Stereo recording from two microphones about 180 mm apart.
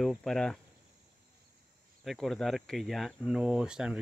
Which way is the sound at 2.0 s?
Centre (ahead or behind).